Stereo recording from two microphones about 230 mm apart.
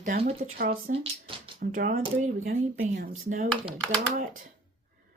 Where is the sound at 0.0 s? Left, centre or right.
Right.